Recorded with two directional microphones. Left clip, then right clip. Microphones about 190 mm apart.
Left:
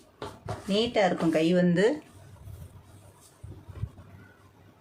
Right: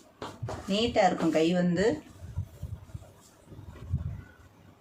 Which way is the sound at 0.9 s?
40° left (ahead or behind).